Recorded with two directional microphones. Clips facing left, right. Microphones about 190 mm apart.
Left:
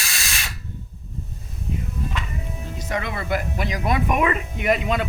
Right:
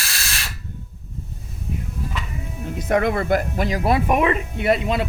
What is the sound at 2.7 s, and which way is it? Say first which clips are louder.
Speech: right 9 dB; 55° right (ahead or behind).